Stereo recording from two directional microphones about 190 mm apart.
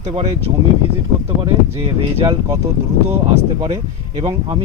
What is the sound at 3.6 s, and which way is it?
Speech, 25° right (ahead or behind).